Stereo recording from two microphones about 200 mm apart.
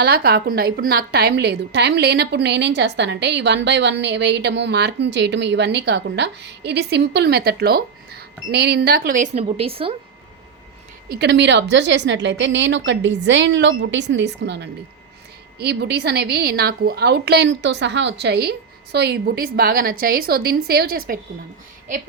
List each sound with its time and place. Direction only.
0.0 s a woman's voice: 50° right (ahead or behind); by 9.9 s 30° right (ahead or behind)
11.1 s a woman's voice: 55° right (ahead or behind)